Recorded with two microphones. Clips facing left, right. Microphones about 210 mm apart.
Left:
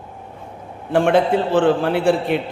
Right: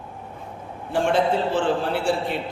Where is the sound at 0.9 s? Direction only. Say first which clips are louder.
Left 5 dB; 60° left (ahead or behind).